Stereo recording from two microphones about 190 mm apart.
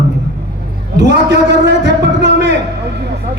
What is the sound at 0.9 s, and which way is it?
A man's voice, 65° right (ahead or behind).